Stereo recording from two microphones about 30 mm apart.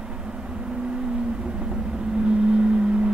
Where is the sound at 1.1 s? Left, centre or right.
Right.